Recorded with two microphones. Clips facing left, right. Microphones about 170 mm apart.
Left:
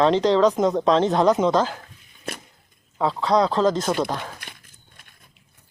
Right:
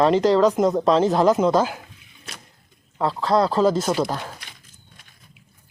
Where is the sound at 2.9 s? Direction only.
Centre (ahead or behind).